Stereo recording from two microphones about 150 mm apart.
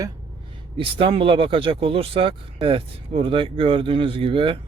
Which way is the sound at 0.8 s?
35° right (ahead or behind).